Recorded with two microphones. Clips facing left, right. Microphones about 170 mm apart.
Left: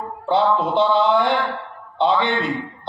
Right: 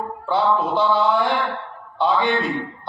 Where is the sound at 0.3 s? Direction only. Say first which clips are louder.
Left 2 dB; 25° left (ahead or behind).